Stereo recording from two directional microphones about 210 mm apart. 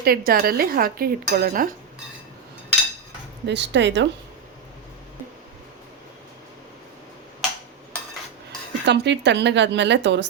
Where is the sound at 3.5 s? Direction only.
55° right (ahead or behind).